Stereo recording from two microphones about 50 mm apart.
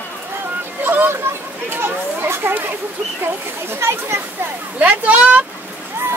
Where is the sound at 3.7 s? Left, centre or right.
Right.